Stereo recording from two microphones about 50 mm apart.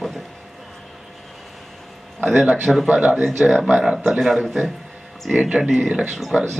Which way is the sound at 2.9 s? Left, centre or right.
Right.